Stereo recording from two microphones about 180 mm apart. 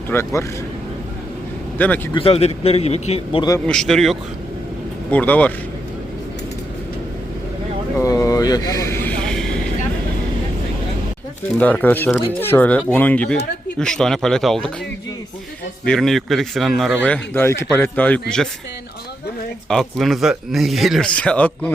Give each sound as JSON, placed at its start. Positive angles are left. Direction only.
{"t": 0.1, "sound": "speech", "side_deg": 15}
{"t": 1.8, "sound": "speech", "side_deg": 10}
{"t": 2.1, "sound": "speech", "side_deg": 30}
{"t": 3.7, "sound": "speech", "side_deg": 5}
{"t": 7.9, "sound": "a sound", "side_deg": 20}
{"t": 11.5, "sound": "speech", "side_deg": 10}
{"t": 15.8, "sound": "speech", "side_deg": 5}
{"t": 19.6, "sound": "speech", "side_deg": 0}